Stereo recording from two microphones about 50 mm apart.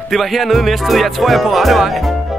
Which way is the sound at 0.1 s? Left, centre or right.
Centre.